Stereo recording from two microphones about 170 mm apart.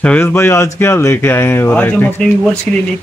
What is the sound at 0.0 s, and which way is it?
Speech, 10° left (ahead or behind).